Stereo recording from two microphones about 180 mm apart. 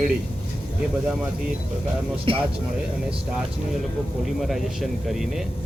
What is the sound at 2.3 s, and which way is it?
Speech, 30° right (ahead or behind).